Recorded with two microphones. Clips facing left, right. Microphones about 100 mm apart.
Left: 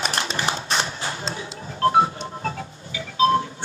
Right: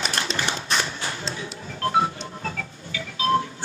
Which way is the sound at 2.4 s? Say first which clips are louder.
Left 3 dB; 30° left (ahead or behind).